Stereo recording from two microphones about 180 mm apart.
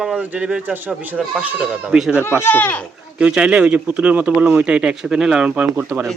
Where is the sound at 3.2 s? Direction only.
5° right (ahead or behind).